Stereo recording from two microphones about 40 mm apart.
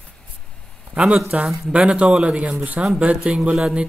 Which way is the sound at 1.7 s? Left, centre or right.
Right.